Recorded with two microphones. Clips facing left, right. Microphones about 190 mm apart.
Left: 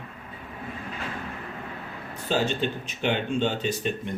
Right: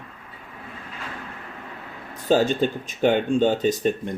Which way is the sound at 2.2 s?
45° right (ahead or behind).